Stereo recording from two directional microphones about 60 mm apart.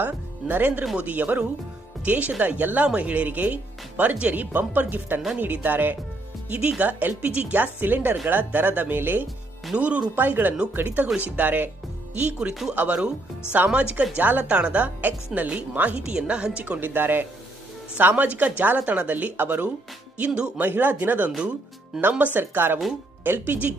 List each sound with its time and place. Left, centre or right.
0.0 s speech: right
6.5 s speech: right
9.7 s speech: right
20.7 s speech: right